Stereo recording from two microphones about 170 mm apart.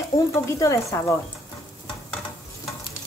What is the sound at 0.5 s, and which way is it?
Speech, 15° left (ahead or behind).